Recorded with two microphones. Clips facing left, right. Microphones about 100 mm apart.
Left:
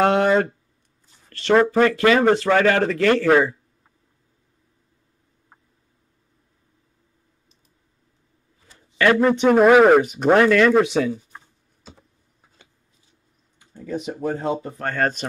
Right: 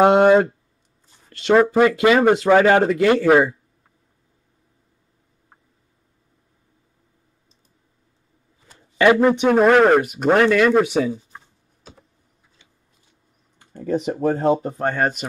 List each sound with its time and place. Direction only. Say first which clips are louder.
0.0 s speech: right 4 dB; 15° right (ahead or behind)
1.5 s speech: right 2 dB; 10° right (ahead or behind)
8.9 s speech: right 2 dB; 15° right (ahead or behind)
9.5 s speech: left 2 dB; 5° left (ahead or behind)
13.7 s speech: right 6 dB; 50° right (ahead or behind); by 15.0 s 25° right (ahead or behind)
15.0 s speech: left 4 dB; 5° right (ahead or behind)